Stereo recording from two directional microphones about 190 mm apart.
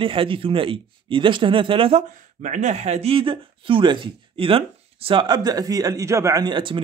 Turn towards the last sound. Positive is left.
turn(degrees=-25)  # may be behind; listen again after turning